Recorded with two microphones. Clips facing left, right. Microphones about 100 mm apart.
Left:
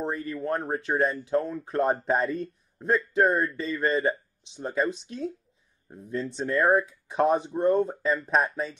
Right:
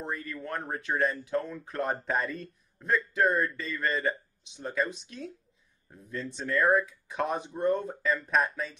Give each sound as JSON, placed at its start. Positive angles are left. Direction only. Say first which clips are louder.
{"t": 0.0, "sound": "speech", "louder": "left 6 dB", "side_deg": 30}